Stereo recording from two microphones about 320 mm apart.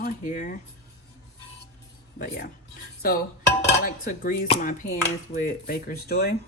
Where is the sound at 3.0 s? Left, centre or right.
Left.